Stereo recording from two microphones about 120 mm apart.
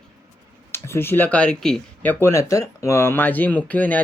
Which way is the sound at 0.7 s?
20° left (ahead or behind).